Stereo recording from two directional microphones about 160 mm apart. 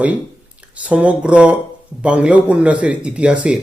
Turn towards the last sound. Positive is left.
turn(degrees=-5)  # may be behind; listen again after turning